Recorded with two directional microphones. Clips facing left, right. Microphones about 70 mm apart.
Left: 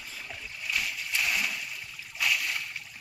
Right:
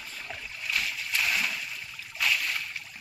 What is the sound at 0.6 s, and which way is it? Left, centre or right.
Splash, centre.